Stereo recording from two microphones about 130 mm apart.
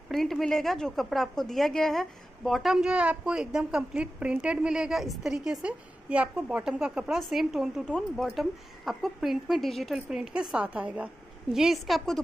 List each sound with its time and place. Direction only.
0.1 s a woman's voice: centre (ahead or behind)